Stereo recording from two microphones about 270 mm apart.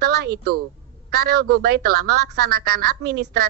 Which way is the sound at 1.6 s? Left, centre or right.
Right.